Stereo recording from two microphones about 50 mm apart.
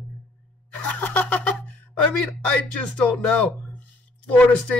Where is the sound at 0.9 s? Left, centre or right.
Left.